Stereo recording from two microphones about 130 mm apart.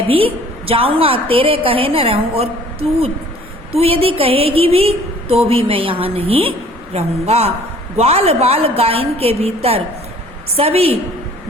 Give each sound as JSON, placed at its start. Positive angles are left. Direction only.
{"t": 0.6, "sound": "a woman's voice", "side_deg": -45}